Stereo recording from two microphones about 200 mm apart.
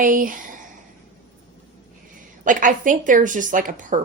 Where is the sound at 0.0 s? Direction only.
45° right (ahead or behind).